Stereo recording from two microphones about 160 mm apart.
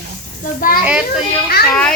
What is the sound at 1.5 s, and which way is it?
Speech, 75° left (ahead or behind).